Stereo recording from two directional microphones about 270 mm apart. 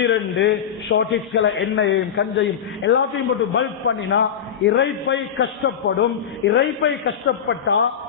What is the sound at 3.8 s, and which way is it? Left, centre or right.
A man's voice, left.